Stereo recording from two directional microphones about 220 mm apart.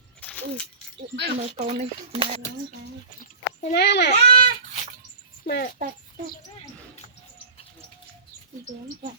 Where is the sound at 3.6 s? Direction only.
45° left (ahead or behind).